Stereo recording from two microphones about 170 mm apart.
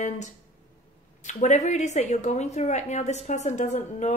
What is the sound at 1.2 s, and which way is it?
A woman's voice, 45° left (ahead or behind).